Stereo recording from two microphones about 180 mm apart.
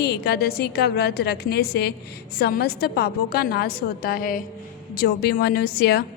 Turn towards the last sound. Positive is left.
turn(degrees=60)  # may be behind; listen again after turning